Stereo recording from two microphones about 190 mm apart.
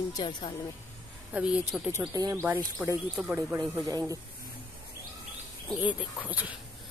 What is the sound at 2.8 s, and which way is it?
Speech, 10° right (ahead or behind).